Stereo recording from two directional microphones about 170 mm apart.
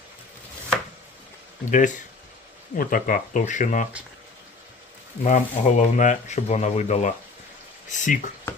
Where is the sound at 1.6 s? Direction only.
50° left (ahead or behind).